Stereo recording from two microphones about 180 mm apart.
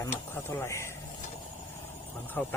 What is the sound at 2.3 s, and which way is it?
Speech, 10° left (ahead or behind).